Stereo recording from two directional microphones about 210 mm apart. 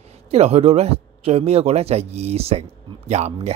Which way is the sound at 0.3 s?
30° right (ahead or behind).